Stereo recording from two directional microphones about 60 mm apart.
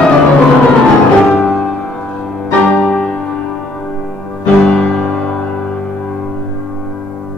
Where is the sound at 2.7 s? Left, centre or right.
Left.